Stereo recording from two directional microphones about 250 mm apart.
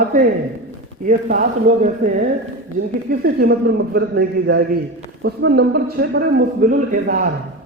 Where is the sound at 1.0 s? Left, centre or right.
Right.